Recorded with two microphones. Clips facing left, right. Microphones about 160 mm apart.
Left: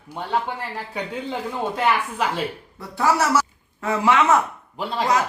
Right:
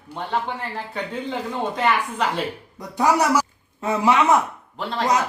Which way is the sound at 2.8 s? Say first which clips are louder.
Right 1 dB; 15° right (ahead or behind).